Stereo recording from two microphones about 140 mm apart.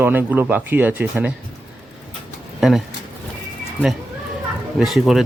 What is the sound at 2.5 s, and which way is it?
Speech, centre (ahead or behind).